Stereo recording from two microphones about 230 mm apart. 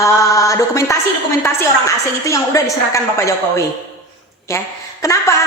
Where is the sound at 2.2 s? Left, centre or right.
Centre.